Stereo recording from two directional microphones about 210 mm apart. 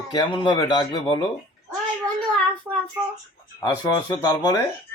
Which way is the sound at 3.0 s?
10° right (ahead or behind).